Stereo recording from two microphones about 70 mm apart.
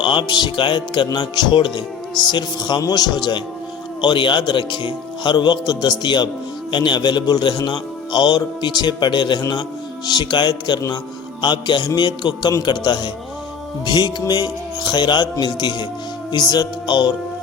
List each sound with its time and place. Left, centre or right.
0.3 s a man's voice: left
10.1 s a man's voice: left